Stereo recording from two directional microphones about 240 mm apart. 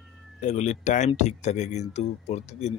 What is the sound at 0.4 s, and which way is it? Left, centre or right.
Speech, left.